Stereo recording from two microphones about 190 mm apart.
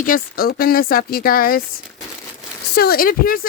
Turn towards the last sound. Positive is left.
turn(degrees=50)  # may be behind; listen again after turning